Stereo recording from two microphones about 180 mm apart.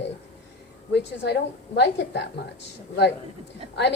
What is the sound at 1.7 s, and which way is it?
Speech, 70° left (ahead or behind).